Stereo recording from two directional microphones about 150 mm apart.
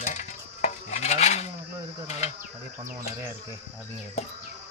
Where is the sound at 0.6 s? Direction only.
50° left (ahead or behind).